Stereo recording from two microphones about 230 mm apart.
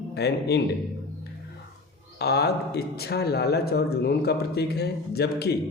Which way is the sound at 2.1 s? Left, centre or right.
Left.